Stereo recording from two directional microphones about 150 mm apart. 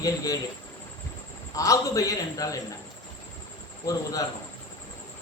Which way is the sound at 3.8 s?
25° left (ahead or behind).